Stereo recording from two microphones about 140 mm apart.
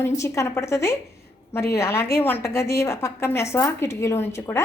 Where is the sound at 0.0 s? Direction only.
20° left (ahead or behind).